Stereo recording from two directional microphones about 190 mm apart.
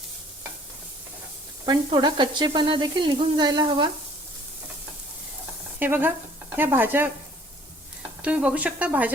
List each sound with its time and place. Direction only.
1.6 s frying: 20° right (ahead or behind)
5.8 s speech: 10° right (ahead or behind)
8.2 s speech: 5° right (ahead or behind)